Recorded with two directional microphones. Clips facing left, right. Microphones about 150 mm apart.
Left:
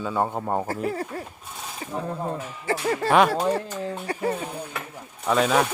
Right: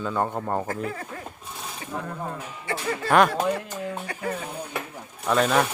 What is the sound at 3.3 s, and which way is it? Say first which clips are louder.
Speech: left 2 dB; 35° left (ahead or behind).